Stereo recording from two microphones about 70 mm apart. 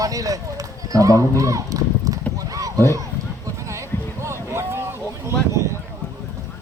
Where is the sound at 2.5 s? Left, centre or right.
Right.